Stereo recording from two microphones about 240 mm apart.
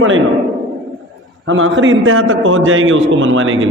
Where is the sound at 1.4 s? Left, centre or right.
Right.